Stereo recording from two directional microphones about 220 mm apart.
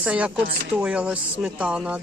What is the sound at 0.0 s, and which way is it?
Speech, 5° right (ahead or behind).